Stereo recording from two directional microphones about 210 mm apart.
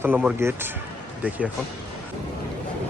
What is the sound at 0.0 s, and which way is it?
Speech, 5° right (ahead or behind).